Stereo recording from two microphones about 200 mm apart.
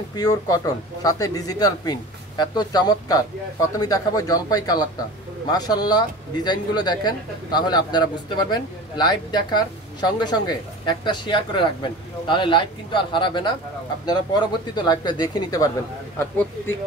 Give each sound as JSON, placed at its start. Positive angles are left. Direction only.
{"t": 0.1, "sound": "speech", "side_deg": 20}
{"t": 14.8, "sound": "speech", "side_deg": 20}